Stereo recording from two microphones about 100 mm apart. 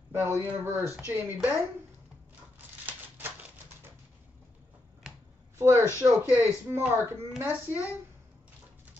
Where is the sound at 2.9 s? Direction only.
20° right (ahead or behind).